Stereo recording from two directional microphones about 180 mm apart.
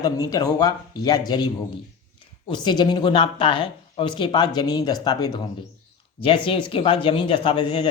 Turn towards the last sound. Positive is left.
turn(degrees=25)  # may be behind; listen again after turning